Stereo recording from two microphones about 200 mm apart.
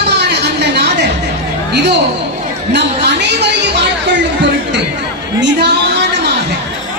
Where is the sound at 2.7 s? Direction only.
60° right (ahead or behind).